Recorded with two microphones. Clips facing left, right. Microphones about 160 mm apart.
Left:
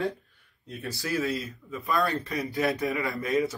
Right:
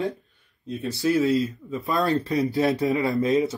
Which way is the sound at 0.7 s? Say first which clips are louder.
Right 9 dB; 20° right (ahead or behind).